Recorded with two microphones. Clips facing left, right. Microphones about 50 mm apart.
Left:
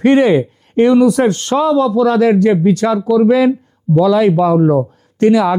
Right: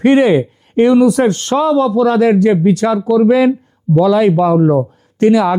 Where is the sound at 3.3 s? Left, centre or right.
Centre.